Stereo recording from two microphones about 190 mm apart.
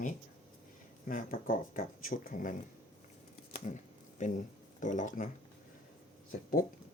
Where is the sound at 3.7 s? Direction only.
40° left (ahead or behind).